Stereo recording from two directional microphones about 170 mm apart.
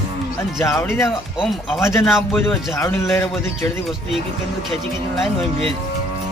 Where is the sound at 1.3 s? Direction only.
Centre (ahead or behind).